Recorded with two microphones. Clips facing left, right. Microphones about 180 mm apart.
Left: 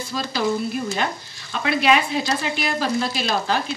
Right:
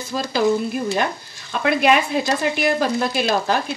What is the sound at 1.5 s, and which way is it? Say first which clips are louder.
Speech: right 2 dB; 50° right (ahead or behind).